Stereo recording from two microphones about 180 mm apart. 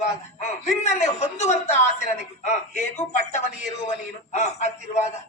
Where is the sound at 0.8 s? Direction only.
40° left (ahead or behind).